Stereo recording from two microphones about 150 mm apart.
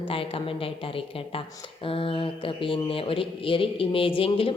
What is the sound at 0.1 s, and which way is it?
Speech, 35° left (ahead or behind).